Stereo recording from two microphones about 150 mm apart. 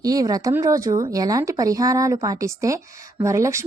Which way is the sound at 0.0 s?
25° right (ahead or behind).